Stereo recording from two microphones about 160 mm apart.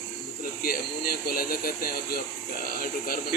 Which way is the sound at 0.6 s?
70° left (ahead or behind).